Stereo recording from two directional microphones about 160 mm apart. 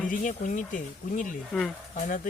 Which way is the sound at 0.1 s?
55° left (ahead or behind).